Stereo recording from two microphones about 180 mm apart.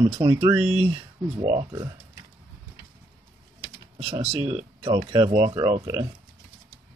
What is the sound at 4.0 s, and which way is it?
Speech, 35° right (ahead or behind).